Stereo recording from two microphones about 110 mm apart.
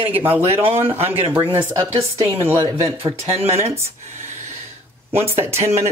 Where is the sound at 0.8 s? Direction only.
65° right (ahead or behind).